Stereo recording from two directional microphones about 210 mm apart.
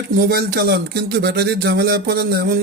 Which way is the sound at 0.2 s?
50° right (ahead or behind).